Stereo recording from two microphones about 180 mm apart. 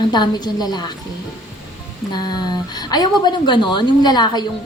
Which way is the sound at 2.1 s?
25° left (ahead or behind).